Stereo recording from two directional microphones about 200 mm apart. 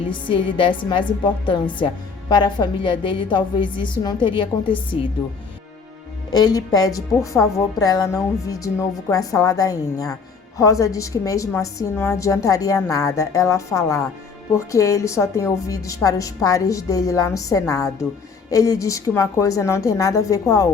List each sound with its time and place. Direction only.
0.1 s a woman's voice: 25° left (ahead or behind)
6.3 s a woman's voice: 20° left (ahead or behind)